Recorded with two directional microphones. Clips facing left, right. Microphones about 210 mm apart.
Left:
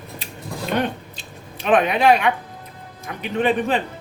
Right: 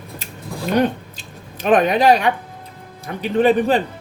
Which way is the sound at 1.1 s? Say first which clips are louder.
Right 1 dB; 40° right (ahead or behind).